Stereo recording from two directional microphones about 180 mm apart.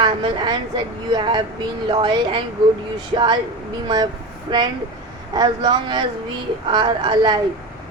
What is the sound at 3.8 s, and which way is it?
Child singing, 25° right (ahead or behind).